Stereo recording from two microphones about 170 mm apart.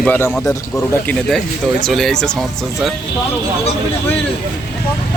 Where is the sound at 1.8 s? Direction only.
5° left (ahead or behind).